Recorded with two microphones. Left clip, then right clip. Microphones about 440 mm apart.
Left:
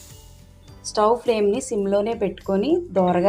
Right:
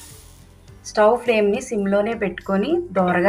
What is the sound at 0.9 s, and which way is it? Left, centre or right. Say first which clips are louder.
A woman's voice: right 3 dB; left.